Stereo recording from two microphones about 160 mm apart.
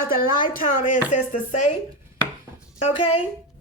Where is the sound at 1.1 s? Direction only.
50° left (ahead or behind).